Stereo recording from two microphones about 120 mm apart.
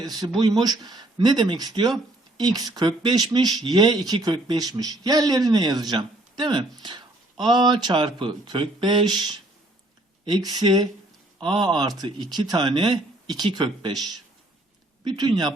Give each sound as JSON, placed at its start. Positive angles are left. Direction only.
{"t": 0.0, "sound": "speech", "side_deg": -35}